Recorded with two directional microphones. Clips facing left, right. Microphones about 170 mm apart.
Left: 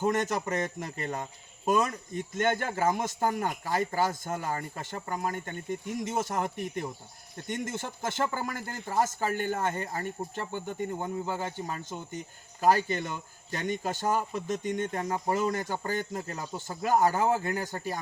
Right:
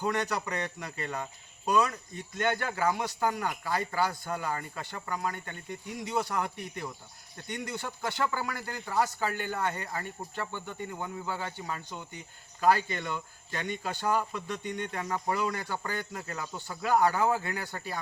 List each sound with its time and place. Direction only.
0.0 s speech: 45° left (ahead or behind)